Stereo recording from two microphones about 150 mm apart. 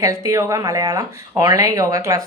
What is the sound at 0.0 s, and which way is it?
Speech, 20° right (ahead or behind).